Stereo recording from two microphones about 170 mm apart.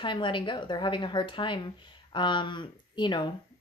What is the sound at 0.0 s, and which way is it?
A woman's voice, 30° left (ahead or behind).